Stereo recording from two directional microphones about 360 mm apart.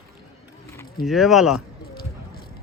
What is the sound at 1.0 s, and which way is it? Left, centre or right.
Speech, centre.